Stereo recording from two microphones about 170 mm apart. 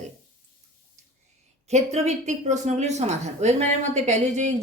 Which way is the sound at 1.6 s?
40° right (ahead or behind).